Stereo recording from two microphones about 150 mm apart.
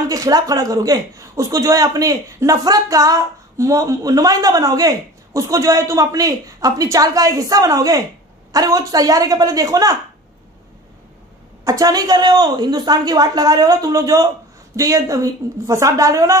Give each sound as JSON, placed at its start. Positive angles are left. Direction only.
{"t": 0.1, "sound": "a man's voice", "side_deg": -25}
{"t": 11.6, "sound": "a man's voice", "side_deg": -25}